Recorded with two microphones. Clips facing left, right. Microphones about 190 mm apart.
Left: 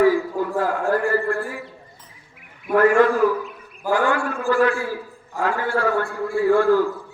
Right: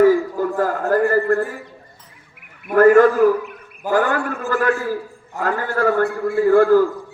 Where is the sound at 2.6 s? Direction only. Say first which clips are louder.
Right 4 dB; 45° right (ahead or behind).